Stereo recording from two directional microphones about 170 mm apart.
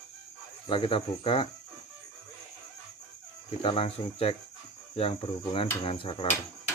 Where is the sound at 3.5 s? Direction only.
35° left (ahead or behind).